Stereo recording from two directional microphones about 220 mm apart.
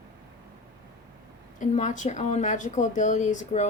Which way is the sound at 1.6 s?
35° left (ahead or behind).